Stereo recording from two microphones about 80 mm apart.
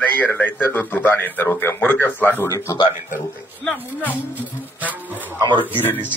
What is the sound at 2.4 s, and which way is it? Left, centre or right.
Speech, left.